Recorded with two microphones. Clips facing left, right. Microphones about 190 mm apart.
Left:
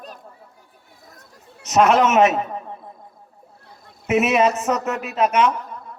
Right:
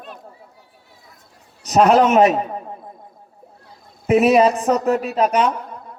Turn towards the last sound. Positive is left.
turn(degrees=-35)  # may be behind; listen again after turning